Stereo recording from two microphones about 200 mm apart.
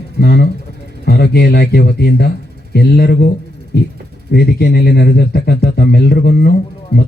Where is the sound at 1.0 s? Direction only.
50° left (ahead or behind).